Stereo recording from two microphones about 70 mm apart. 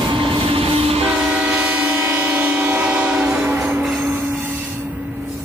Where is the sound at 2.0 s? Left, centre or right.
Right.